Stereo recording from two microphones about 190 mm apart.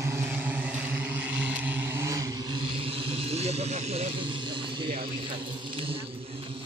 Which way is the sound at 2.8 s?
30° right (ahead or behind).